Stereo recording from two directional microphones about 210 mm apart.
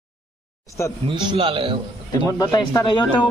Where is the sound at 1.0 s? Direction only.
25° right (ahead or behind).